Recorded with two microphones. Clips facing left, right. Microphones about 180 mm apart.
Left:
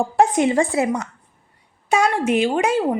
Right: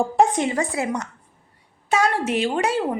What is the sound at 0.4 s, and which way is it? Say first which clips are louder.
Speech: left 5 dB; 25° left (ahead or behind).